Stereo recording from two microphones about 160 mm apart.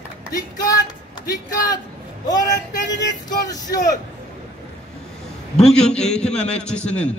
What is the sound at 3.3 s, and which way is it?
Speech, 25° left (ahead or behind).